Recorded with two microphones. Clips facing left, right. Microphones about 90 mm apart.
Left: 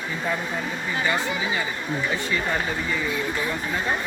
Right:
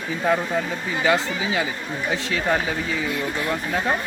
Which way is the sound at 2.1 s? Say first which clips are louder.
Right 3 dB; 90° right.